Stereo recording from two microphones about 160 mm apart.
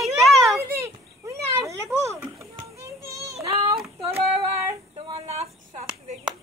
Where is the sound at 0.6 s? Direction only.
15° right (ahead or behind).